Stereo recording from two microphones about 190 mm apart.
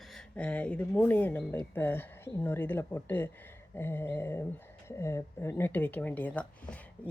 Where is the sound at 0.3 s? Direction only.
5° left (ahead or behind).